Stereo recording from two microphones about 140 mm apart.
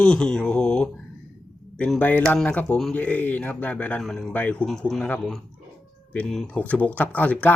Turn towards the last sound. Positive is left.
turn(degrees=10)  # may be behind; listen again after turning